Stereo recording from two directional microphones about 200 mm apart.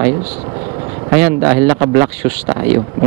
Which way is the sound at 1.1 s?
20° right (ahead or behind).